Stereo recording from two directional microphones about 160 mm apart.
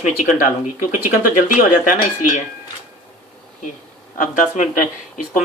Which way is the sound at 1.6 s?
55° left (ahead or behind).